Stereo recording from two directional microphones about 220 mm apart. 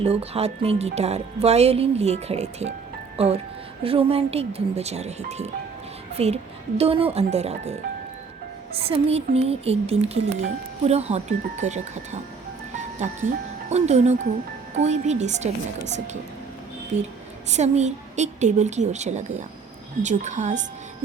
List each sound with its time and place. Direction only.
0.0 s speech: 25° right (ahead or behind)
8.9 s speech: 25° right (ahead or behind)
13.7 s a woman's voice: 30° right (ahead or behind)
16.9 s a woman's voice: 30° right (ahead or behind)